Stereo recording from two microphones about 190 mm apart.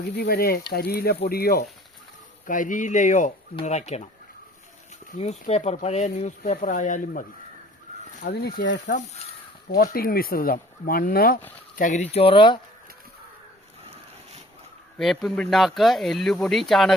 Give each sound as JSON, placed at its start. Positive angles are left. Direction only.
{"t": 0.2, "sound": "speech", "side_deg": 55}
{"t": 2.5, "sound": "speech", "side_deg": 45}
{"t": 5.2, "sound": "speech", "side_deg": 35}
{"t": 8.2, "sound": "speech", "side_deg": 60}
{"t": 9.6, "sound": "speech", "side_deg": 55}
{"t": 11.8, "sound": "speech", "side_deg": 40}
{"t": 14.9, "sound": "speech", "side_deg": 0}